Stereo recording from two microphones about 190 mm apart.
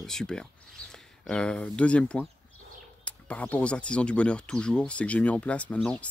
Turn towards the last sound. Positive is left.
turn(degrees=5)  # may be behind; listen again after turning